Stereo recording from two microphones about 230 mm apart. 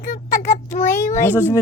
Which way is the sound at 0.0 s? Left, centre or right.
Left.